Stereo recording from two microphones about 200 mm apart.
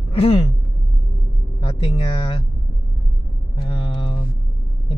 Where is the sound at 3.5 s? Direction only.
25° left (ahead or behind).